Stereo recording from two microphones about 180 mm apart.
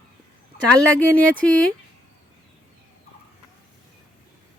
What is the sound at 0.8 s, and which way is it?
Speech, 5° left (ahead or behind).